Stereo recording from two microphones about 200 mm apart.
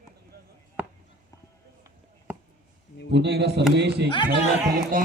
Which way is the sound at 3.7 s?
60° right (ahead or behind).